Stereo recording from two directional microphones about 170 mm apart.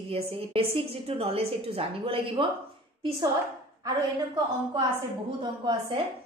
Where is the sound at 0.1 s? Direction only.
30° right (ahead or behind).